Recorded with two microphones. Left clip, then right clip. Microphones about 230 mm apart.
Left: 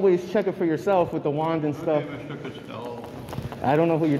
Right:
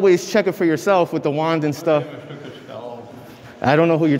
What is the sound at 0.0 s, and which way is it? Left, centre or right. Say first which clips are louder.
A man's voice: right 6 dB; right.